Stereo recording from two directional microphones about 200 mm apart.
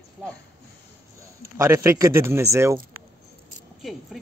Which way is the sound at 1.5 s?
15° right (ahead or behind).